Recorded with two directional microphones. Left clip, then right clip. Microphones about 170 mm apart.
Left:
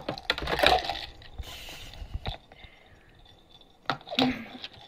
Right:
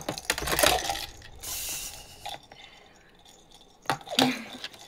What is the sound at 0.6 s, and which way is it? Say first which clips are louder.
Mechanisms: left 3 dB; 15° right (ahead or behind).